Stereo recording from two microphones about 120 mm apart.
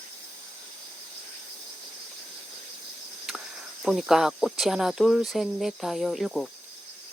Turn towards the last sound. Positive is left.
turn(degrees=0)  # may be behind; listen again after turning